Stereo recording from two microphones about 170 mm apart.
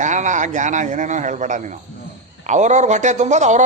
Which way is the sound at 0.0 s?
45° right (ahead or behind).